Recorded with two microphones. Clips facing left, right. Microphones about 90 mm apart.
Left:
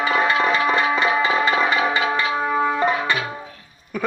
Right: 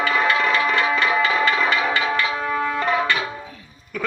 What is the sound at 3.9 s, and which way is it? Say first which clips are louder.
Speech: left 4 dB; 20° left (ahead or behind).